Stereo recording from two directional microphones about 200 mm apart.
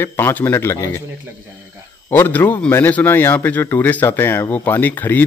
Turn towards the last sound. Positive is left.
turn(degrees=10)  # may be behind; listen again after turning